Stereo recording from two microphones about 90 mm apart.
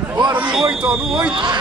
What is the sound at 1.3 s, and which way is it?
Speech, 60° right (ahead or behind).